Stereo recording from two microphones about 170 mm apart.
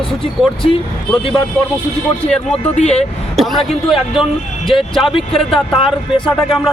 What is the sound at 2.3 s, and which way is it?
Speech, 5° left (ahead or behind).